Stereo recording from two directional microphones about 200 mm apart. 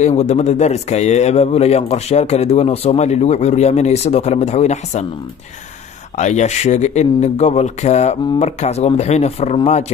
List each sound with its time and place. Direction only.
0.0 s a man's voice: 35° left (ahead or behind)
6.1 s a man's voice: 35° left (ahead or behind)